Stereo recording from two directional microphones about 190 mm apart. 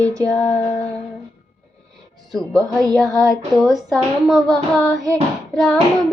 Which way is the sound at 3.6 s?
Centre (ahead or behind).